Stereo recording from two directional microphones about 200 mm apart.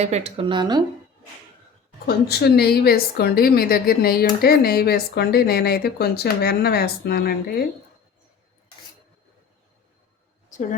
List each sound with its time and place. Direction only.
0.0 s speech: 35° right (ahead or behind)
2.0 s a woman's voice: 55° left (ahead or behind)
10.5 s speech: 40° left (ahead or behind)